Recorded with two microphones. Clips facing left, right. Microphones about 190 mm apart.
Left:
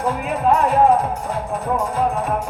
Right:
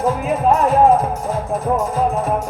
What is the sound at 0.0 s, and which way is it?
Music, 45° right (ahead or behind).